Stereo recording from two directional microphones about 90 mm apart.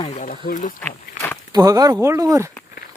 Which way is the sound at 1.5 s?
45° right (ahead or behind).